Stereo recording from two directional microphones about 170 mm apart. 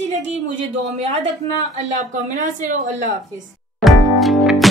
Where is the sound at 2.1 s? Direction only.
50° right (ahead or behind).